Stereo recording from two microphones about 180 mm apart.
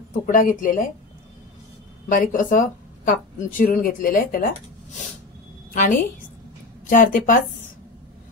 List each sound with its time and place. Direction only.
0.3 s speech: 50° left (ahead or behind)
2.0 s speech: 50° left (ahead or behind)
5.7 s a woman's voice: 45° left (ahead or behind)